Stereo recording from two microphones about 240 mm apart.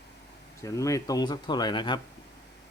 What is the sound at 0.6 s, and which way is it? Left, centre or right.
Speech, centre.